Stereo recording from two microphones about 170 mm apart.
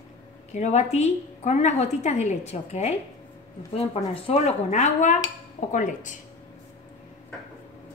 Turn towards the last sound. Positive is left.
turn(degrees=50)  # may be behind; listen again after turning